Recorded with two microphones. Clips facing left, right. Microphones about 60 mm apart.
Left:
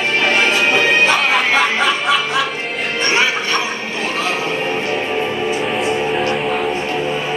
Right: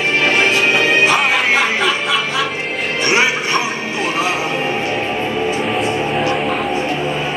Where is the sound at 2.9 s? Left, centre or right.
Centre.